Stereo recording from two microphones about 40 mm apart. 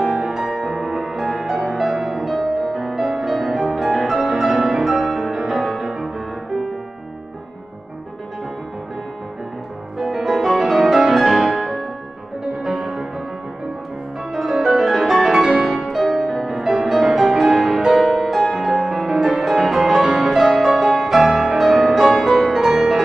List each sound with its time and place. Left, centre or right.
0.0 s music: centre
3.0 s music: centre
9.9 s music: centre
11.4 s music: right
12.6 s music: centre
14.3 s music: centre